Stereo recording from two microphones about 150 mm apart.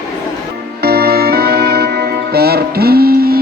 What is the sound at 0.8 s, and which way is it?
Music, 90° right.